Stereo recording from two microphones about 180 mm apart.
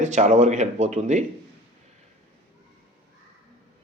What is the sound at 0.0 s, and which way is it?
Speech, 40° right (ahead or behind).